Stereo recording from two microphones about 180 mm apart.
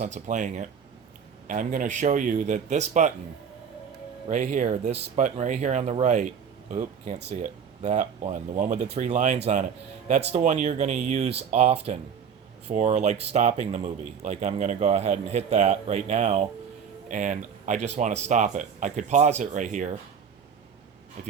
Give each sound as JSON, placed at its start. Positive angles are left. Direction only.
{"t": 0.0, "sound": "speech", "side_deg": -45}
{"t": 4.3, "sound": "speech", "side_deg": -40}